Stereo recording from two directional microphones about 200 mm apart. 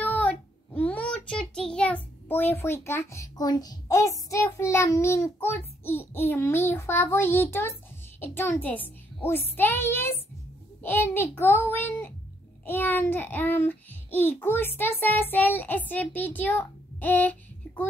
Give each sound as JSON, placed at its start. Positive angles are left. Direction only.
{"t": 0.0, "sound": "child singing", "side_deg": 5}
{"t": 5.9, "sound": "a child's voice", "side_deg": 10}